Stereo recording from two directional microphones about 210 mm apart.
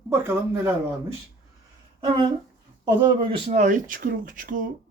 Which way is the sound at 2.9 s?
20° right (ahead or behind).